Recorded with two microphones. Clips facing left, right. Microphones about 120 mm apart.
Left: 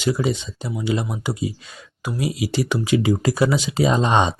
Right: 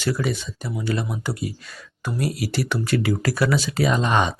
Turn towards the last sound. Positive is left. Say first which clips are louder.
# left 3 dB
turn(degrees=25)  # may be behind; listen again after turning